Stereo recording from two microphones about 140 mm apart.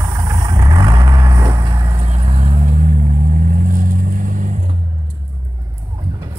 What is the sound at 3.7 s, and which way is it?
Vehicle, 80° right.